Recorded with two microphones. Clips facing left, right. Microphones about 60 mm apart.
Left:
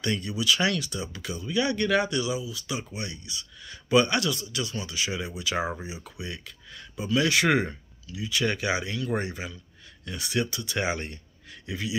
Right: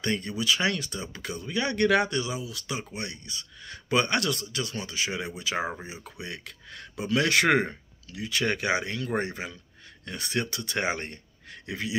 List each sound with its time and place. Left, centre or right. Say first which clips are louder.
0.0 s speech: even; right
1.3 s speech: left 1 dB; right
1.6 s speech: right 1 dB; right
5.1 s speech: even; right
5.4 s speech: left 2 dB; right
6.1 s speech: left 1 dB; right